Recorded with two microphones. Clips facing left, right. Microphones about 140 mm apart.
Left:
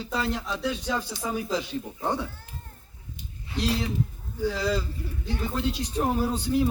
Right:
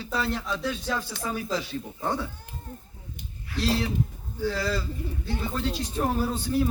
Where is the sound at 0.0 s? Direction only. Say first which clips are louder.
Even; 15° left (ahead or behind).